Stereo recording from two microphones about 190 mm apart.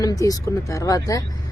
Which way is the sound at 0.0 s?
20° left (ahead or behind).